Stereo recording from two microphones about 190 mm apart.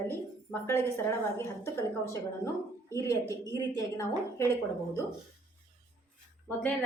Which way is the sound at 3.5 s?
15° left (ahead or behind).